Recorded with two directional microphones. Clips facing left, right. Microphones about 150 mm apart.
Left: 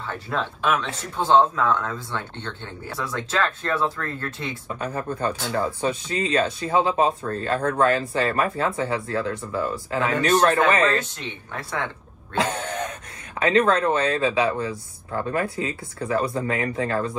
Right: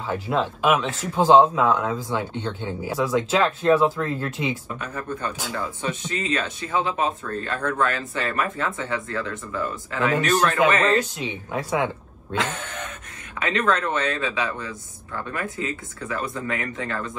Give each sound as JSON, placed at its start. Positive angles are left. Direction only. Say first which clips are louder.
{"t": 0.0, "sound": "speech", "louder": "right 4 dB", "side_deg": -5}
{"t": 4.7, "sound": "speech", "louder": "left 3 dB", "side_deg": 35}
{"t": 11.1, "sound": "speech", "louder": "right 5 dB", "side_deg": -10}
{"t": 12.4, "sound": "a sound", "louder": "left 3 dB", "side_deg": 35}
{"t": 13.4, "sound": "speech", "louder": "left 4 dB", "side_deg": 35}